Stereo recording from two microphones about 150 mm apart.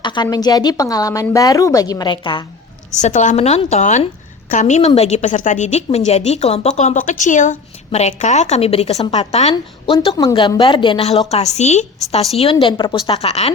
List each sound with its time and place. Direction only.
0.0 s speech: 30° left (ahead or behind)
2.9 s a woman's voice: 55° left (ahead or behind)
12.4 s a woman's voice: 35° left (ahead or behind)